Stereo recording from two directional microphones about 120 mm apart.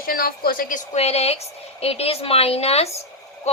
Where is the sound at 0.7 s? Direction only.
80° left.